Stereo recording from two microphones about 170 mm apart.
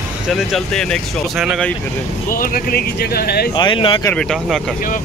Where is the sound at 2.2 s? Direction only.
55° left (ahead or behind).